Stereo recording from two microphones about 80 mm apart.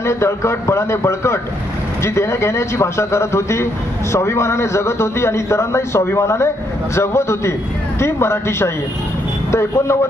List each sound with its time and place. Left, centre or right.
0.0 s a man's voice: left